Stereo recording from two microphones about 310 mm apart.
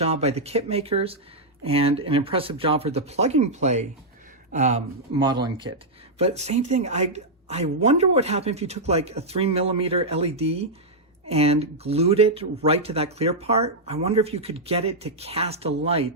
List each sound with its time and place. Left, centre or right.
0.0 s speech: centre